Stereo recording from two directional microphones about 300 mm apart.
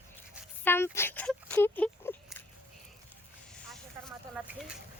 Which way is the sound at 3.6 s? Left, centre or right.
Centre.